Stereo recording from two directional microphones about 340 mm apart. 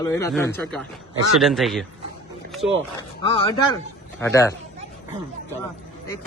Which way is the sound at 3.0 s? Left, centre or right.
Centre.